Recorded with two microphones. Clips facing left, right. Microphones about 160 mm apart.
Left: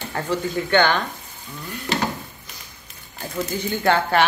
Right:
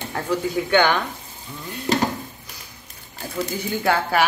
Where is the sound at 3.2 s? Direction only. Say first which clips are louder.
Left 1 dB; 10° right (ahead or behind).